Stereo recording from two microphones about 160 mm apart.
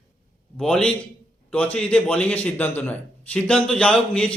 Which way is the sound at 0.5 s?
5° left (ahead or behind).